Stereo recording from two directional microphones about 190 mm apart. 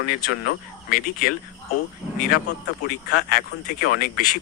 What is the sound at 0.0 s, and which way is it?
Speech, 55° left (ahead or behind).